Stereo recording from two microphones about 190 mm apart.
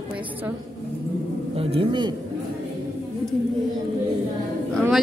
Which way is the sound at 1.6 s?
30° right (ahead or behind).